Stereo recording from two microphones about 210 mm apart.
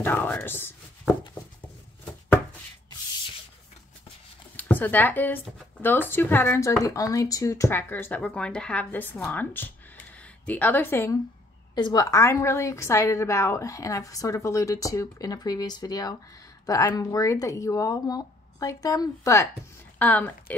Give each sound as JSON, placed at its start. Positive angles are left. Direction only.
{"t": 0.0, "sound": "speech", "side_deg": 10}
{"t": 4.6, "sound": "speech", "side_deg": 10}